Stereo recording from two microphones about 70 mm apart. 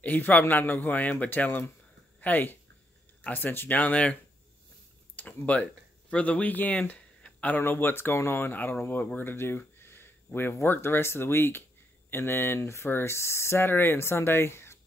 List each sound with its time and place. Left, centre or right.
0.0 s speech: left